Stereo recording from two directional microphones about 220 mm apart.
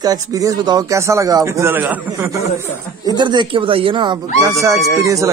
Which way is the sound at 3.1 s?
20° right (ahead or behind).